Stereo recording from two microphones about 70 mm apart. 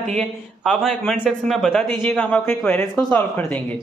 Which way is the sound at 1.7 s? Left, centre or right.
Centre.